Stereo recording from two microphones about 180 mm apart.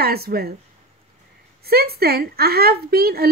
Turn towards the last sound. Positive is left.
turn(degrees=-60)  # may be behind; listen again after turning